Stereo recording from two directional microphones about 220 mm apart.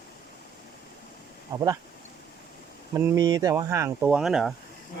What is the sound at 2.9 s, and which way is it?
Speech, 15° right (ahead or behind).